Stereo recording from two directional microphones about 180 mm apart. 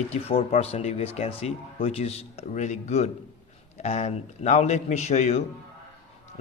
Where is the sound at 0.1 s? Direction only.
35° left (ahead or behind).